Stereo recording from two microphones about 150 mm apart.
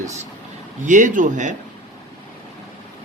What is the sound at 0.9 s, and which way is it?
Speech, 55° right (ahead or behind).